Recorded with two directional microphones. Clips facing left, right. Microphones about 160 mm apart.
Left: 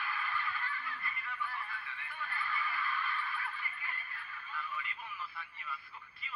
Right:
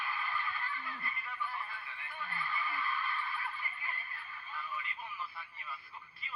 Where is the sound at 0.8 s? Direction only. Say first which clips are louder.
Even; 25° right (ahead or behind).